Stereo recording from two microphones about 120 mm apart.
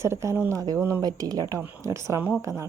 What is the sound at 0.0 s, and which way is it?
Speech, 25° right (ahead or behind).